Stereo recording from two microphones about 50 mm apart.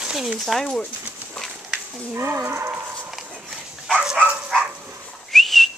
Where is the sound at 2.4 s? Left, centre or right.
Right.